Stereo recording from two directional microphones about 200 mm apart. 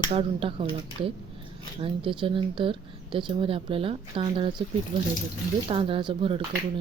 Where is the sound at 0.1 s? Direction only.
30° right (ahead or behind).